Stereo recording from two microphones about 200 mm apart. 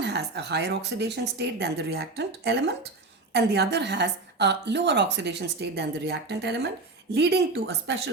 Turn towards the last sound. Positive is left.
turn(degrees=-55)  # may be behind; listen again after turning